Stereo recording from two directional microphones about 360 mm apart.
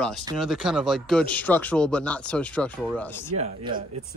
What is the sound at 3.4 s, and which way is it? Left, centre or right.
Speech, centre.